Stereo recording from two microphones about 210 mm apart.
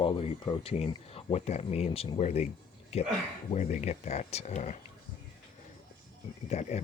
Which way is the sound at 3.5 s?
35° left (ahead or behind).